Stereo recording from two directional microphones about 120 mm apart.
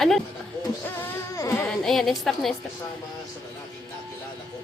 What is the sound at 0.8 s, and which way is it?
Music, 15° left (ahead or behind).